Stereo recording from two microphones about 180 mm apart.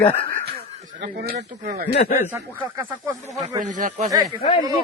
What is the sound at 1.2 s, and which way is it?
Speech, 65° right (ahead or behind).